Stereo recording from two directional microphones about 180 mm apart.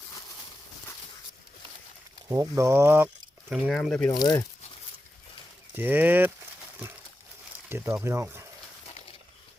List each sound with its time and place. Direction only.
2.3 s speech: 15° right (ahead or behind)
3.5 s speech: centre (ahead or behind)
4.2 s speech: 25° left (ahead or behind)
5.7 s speech: 10° right (ahead or behind)
7.7 s speech: 15° right (ahead or behind)